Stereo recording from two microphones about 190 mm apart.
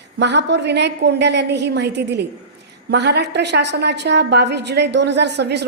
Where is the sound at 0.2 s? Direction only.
65° right (ahead or behind).